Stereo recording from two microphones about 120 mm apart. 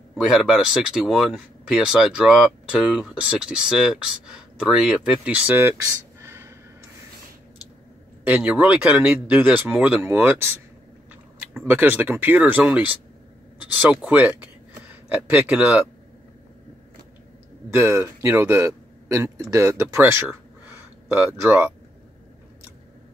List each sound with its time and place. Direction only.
0.1 s speech: 5° right (ahead or behind); by 6.5 s 20° right (ahead or behind)
8.2 s speech: 10° right (ahead or behind)
11.6 s speech: 15° right (ahead or behind)
17.6 s speech: 25° right (ahead or behind)